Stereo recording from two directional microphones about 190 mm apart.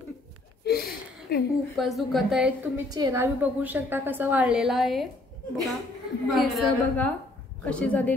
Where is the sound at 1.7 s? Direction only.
Centre (ahead or behind).